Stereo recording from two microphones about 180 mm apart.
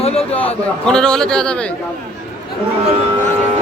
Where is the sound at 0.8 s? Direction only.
5° left (ahead or behind).